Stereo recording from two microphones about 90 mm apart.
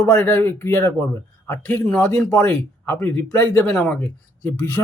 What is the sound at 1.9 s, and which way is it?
Speech, 10° left (ahead or behind).